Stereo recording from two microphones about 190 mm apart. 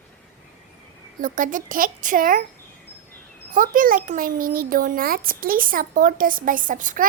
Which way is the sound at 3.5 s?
45° right (ahead or behind).